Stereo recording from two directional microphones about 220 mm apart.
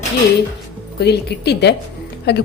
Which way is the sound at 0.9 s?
50° left (ahead or behind).